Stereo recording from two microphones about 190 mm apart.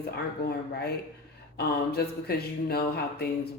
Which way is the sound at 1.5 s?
55° left (ahead or behind).